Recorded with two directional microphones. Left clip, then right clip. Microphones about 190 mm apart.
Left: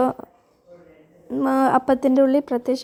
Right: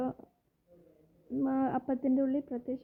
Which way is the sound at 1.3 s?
20° left (ahead or behind).